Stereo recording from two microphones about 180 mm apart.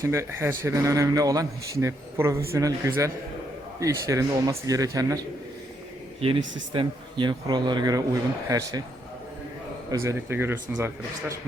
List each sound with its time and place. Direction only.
0.0 s a man's voice: 15° right (ahead or behind)
6.1 s a man's voice: 30° right (ahead or behind)
9.9 s speech: 15° right (ahead or behind)